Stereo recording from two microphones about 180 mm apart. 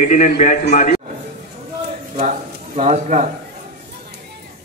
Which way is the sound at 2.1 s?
40° right (ahead or behind).